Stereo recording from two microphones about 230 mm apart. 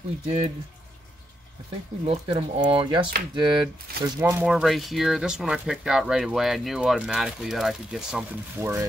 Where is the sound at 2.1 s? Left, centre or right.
Right.